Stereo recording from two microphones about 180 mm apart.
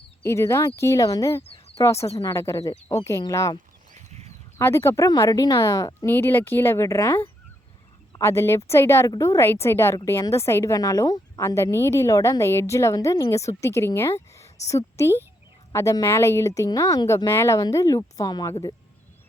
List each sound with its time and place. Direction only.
0.3 s a woman's voice: 15° left (ahead or behind)
1.4 s a sound: 35° left (ahead or behind)
1.8 s a woman's voice: 15° left (ahead or behind)